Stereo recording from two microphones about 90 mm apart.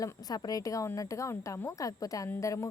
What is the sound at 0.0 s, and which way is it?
A woman's voice, 45° left (ahead or behind).